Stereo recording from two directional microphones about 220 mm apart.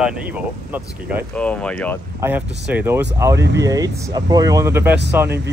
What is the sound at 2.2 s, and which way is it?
Speech, 10° right (ahead or behind).